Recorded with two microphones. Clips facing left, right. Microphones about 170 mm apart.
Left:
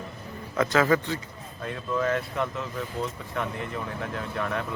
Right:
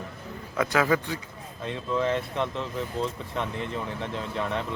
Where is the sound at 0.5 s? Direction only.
10° right (ahead or behind).